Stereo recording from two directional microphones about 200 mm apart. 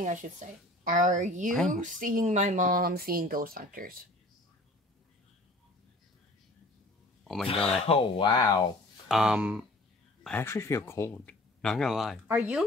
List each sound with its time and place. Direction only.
0.0 s a woman's voice: 40° right (ahead or behind)
7.4 s speech: 25° left (ahead or behind)
9.1 s speech: 5° right (ahead or behind)
10.2 s speech: 10° left (ahead or behind); by 12.6 s 5° right (ahead or behind)